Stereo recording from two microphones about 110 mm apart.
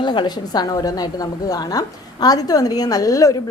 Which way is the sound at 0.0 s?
45° left (ahead or behind).